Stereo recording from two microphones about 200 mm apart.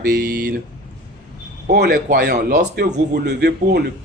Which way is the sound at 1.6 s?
50° right (ahead or behind).